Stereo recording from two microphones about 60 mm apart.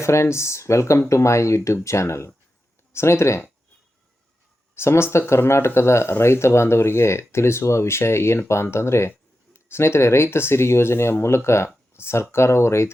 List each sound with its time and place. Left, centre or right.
0.0 s speech: left
4.7 s speech: left